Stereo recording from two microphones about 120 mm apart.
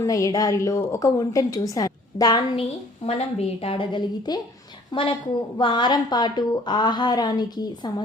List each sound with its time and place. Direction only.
0.0 s a woman's voice: 30° left (ahead or behind)
3.1 s a woman's voice: 55° left (ahead or behind); by 8.0 s 35° left (ahead or behind)